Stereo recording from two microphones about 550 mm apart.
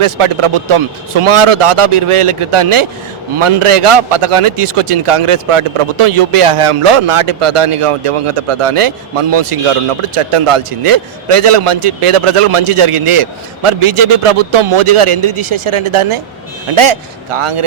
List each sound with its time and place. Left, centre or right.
0.0 s a man's voice: right